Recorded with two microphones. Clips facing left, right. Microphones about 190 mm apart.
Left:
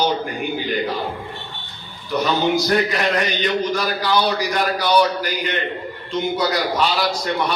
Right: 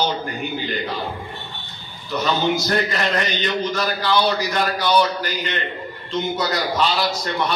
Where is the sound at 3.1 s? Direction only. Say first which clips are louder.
Left 2 dB; 10° left (ahead or behind).